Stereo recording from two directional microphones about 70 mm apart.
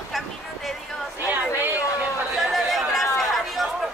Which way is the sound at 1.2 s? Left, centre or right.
Right.